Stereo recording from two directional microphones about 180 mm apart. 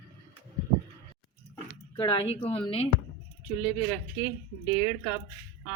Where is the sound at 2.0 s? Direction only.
30° left (ahead or behind).